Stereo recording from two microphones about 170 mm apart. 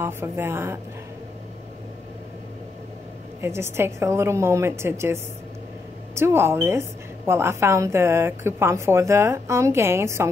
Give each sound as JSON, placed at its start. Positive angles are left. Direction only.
{"t": 0.0, "sound": "a woman's voice", "side_deg": -15}
{"t": 3.3, "sound": "a woman's voice", "side_deg": -15}